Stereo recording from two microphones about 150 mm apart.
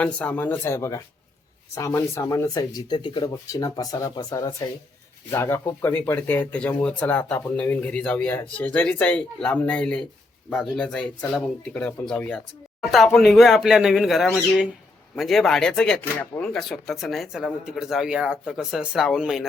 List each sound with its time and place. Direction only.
0.0 s speech: 10° left (ahead or behind)